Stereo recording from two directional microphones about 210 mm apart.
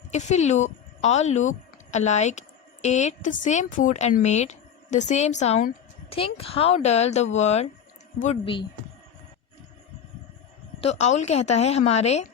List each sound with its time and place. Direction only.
0.1 s a woman's voice: 35° left (ahead or behind)
10.8 s a woman's voice: 30° left (ahead or behind)